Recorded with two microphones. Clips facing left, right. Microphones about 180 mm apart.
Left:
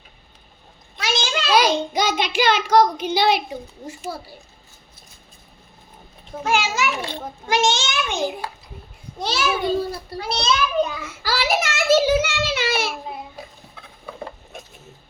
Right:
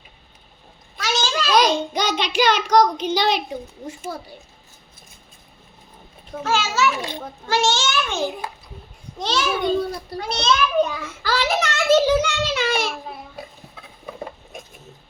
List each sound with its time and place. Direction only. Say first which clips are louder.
1.0 s a sound: right 1 dB; 20° left (ahead or behind)
1.5 s a child's voice: even; 10° left (ahead or behind)
2.2 s a child's voice: right 3 dB; 55° left (ahead or behind)
2.6 s a child's voice: even; 10° left (ahead or behind)
6.4 s a child's voice: right 1 dB; 15° left (ahead or behind)